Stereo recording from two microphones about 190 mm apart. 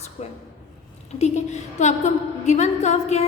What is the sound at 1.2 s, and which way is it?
A woman's voice, 35° left (ahead or behind).